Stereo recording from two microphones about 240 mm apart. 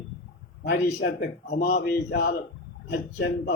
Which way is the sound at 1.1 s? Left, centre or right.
Left.